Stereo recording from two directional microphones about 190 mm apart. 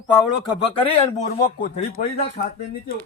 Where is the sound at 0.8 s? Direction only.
35° left (ahead or behind).